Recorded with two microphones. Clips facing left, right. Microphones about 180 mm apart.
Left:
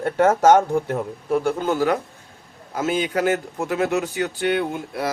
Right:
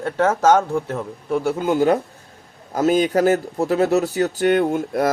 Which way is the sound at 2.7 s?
40° right (ahead or behind).